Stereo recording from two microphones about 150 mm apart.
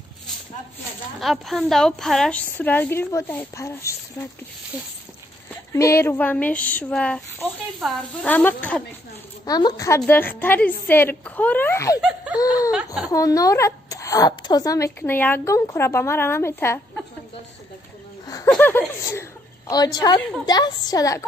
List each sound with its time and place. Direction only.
1.2 s a woman's voice: centre (ahead or behind); by 3.9 s 20° left (ahead or behind)
5.7 s speech: 20° left (ahead or behind)
9.5 s speech: 25° left (ahead or behind)
12.0 s laughter: 5° right (ahead or behind)
12.7 s a woman's voice: 5° right (ahead or behind)
13.1 s speech: 25° left (ahead or behind)
18.5 s speech: 15° left (ahead or behind)
19.7 s speech: 25° left (ahead or behind)